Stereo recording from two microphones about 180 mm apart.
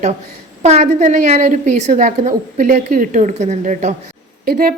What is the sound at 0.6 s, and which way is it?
A woman's voice, 40° right (ahead or behind).